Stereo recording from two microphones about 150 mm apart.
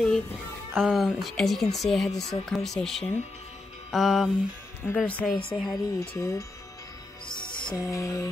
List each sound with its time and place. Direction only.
0.7 s speech: centre (ahead or behind)
4.8 s speech: 10° left (ahead or behind)
5.7 s speech: 20° left (ahead or behind)
7.2 s music: 30° left (ahead or behind)